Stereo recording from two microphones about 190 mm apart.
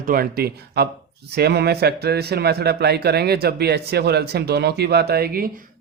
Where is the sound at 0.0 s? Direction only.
50° right (ahead or behind).